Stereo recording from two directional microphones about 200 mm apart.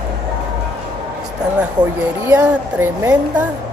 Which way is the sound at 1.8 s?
20° right (ahead or behind).